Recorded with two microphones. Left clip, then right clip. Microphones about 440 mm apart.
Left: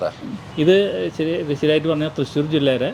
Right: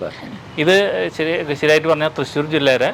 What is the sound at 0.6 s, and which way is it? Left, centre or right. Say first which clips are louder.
Speech: right 2 dB; right.